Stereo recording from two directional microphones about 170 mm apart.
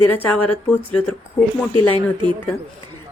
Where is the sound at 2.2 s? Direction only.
30° right (ahead or behind).